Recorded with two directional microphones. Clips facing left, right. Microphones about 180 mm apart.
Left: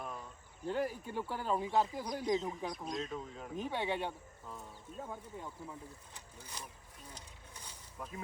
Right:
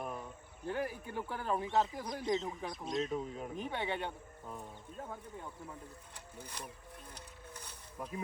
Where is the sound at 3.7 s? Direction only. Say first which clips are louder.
Left 2 dB; 10° left (ahead or behind).